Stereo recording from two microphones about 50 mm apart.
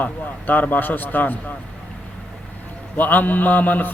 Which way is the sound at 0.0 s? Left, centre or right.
Left.